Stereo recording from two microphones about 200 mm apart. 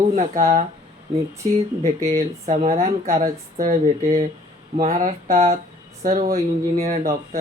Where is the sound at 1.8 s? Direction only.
15° right (ahead or behind).